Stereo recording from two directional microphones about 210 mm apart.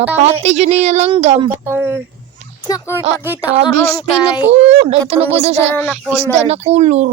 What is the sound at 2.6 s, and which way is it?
Speech, 15° left (ahead or behind).